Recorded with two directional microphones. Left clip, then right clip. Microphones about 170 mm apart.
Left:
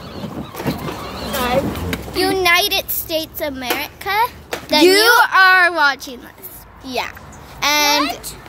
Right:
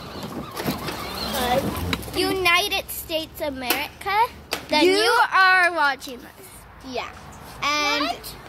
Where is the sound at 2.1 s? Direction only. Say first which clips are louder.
Left 5 dB; 5° right (ahead or behind).